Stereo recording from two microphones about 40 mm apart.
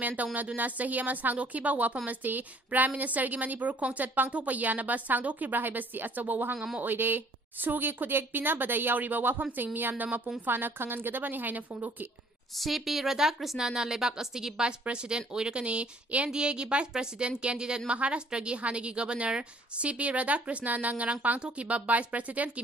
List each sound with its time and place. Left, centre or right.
0.0 s a woman's voice: right
6.5 s speech: right
6.8 s a woman's voice: right
12.5 s a woman's voice: centre; by 21.4 s right
21.4 s a woman's voice: right